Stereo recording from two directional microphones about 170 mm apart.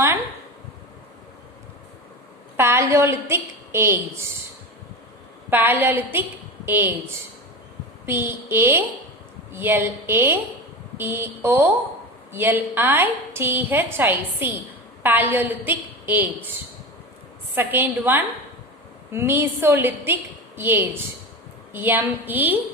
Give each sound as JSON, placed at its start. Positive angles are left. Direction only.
{"t": 2.6, "sound": "a woman's voice", "side_deg": -15}
{"t": 5.5, "sound": "a woman's voice", "side_deg": -10}
{"t": 8.0, "sound": "a woman's voice", "side_deg": -15}
{"t": 17.5, "sound": "a woman's voice", "side_deg": -15}